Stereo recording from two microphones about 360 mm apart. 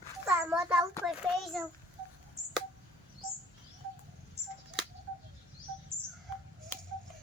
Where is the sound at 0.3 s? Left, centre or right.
Centre.